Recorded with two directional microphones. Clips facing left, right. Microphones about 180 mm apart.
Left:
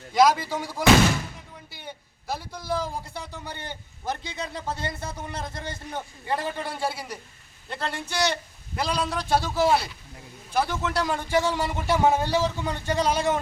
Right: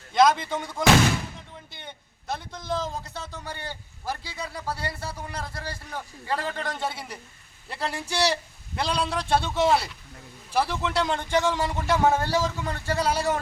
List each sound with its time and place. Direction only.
0.1 s a man's voice: 5° left (ahead or behind)